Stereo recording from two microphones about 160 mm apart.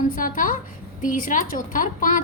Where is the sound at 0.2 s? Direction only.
55° left (ahead or behind).